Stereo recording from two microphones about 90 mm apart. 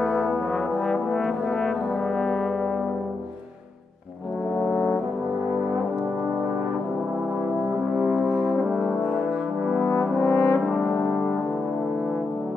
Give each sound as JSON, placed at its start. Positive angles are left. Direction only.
{"t": 0.0, "sound": "brass instrument", "side_deg": 0}
{"t": 4.6, "sound": "brass instrument", "side_deg": 40}
{"t": 8.0, "sound": "brass instrument", "side_deg": 0}
{"t": 9.7, "sound": "brass instrument", "side_deg": 5}
{"t": 10.1, "sound": "brass instrument", "side_deg": 40}
{"t": 10.6, "sound": "brass instrument", "side_deg": 0}